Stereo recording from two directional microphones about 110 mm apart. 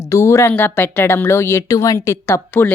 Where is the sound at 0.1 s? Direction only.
25° left (ahead or behind).